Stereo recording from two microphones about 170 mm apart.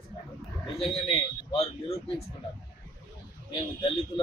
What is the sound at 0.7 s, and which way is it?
Speech, 35° left (ahead or behind).